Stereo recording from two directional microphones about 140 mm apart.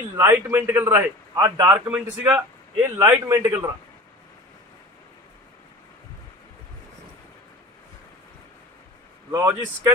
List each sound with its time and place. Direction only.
0.2 s a man's voice: 15° right (ahead or behind)
1.3 s a man's voice: 30° right (ahead or behind)
1.7 s a man's voice: 10° right (ahead or behind)
9.4 s a man's voice: 15° right (ahead or behind)